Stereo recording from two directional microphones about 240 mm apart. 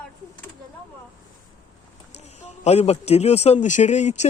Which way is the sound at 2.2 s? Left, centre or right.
Left.